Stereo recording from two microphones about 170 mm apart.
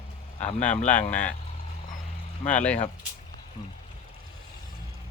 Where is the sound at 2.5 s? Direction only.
10° left (ahead or behind).